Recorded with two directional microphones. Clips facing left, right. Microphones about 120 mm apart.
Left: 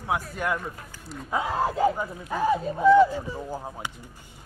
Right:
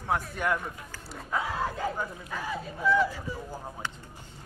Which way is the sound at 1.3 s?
20° left (ahead or behind).